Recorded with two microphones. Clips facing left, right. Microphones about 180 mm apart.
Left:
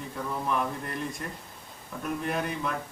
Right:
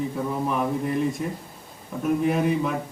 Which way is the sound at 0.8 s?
5° right (ahead or behind).